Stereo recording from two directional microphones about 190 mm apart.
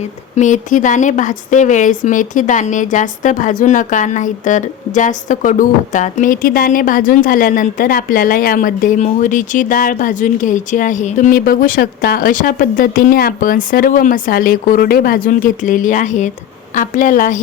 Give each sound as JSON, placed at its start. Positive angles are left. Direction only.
{"t": 0.3, "sound": "a woman's voice", "side_deg": 40}